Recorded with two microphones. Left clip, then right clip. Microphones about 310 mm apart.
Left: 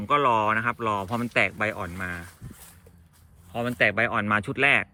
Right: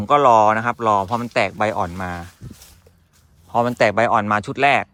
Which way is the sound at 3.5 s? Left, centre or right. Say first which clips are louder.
Right 7 dB; centre.